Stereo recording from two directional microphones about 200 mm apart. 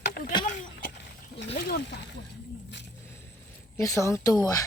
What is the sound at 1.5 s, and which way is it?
Speech, 50° left (ahead or behind).